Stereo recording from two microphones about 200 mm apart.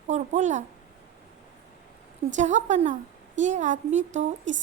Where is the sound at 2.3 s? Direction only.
35° right (ahead or behind).